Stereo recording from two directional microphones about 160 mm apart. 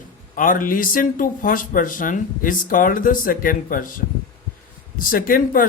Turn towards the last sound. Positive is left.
turn(degrees=60)  # may be behind; listen again after turning